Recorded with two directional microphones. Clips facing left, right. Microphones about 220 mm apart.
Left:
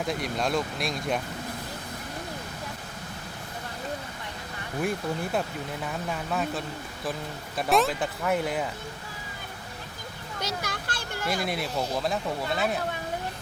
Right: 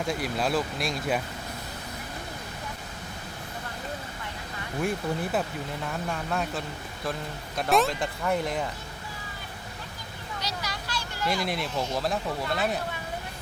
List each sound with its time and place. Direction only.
0.0 s speech: centre (ahead or behind)
4.8 s speech: centre (ahead or behind)
10.4 s speech: 50° left (ahead or behind)
11.4 s speech: centre (ahead or behind)